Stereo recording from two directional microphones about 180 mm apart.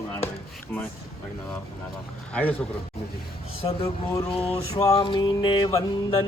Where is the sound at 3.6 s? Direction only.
30° left (ahead or behind).